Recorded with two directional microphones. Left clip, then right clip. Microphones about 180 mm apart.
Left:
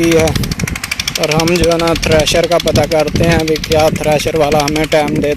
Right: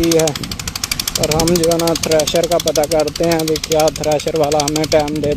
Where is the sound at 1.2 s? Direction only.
40° right (ahead or behind).